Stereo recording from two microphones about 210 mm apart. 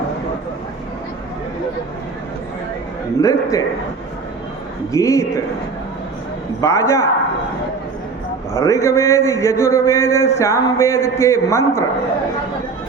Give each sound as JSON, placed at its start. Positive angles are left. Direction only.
{"t": 3.2, "sound": "a man's voice", "side_deg": 15}
{"t": 4.9, "sound": "a man's voice", "side_deg": 15}
{"t": 6.6, "sound": "a man's voice", "side_deg": 15}
{"t": 8.6, "sound": "a man's voice", "side_deg": 15}